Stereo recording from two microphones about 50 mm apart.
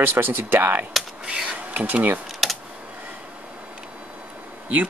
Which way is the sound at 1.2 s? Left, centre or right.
Centre.